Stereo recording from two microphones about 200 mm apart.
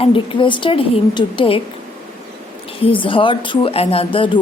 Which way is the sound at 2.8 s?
25° left (ahead or behind).